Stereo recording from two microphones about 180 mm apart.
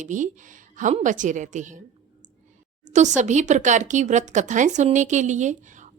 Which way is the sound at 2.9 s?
40° right (ahead or behind).